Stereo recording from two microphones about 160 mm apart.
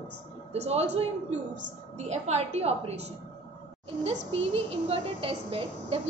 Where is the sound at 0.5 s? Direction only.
40° right (ahead or behind).